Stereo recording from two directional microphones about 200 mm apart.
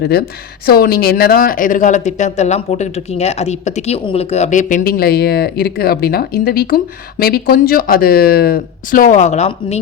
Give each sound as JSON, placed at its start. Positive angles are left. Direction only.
{"t": 0.0, "sound": "speech", "side_deg": 50}